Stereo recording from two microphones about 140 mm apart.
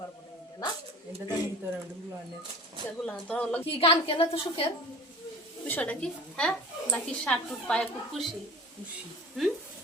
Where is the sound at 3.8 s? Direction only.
40° left (ahead or behind).